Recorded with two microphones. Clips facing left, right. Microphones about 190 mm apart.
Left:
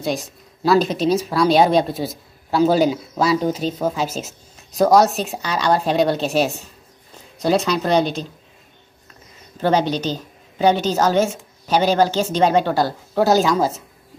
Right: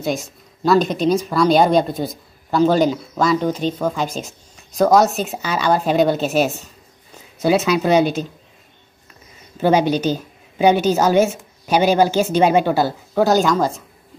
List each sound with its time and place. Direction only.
0.0 s speech: centre (ahead or behind)
9.6 s a woman's voice: 10° right (ahead or behind)